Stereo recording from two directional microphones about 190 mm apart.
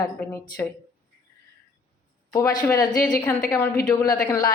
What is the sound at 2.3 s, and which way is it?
Speech, 15° left (ahead or behind).